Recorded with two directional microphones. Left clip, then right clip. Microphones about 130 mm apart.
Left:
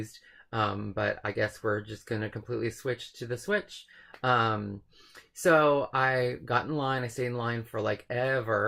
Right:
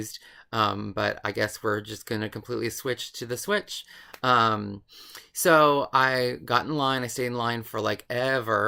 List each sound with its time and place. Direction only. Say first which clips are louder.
0.5 s speech: right 5 dB; 25° right (ahead or behind)